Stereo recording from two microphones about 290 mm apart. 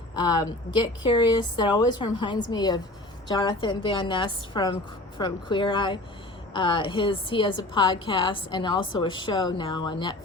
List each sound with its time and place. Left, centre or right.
0.2 s a woman's voice: centre